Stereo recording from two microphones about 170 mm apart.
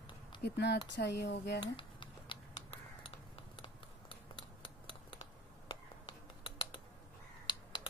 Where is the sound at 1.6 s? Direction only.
30° left (ahead or behind).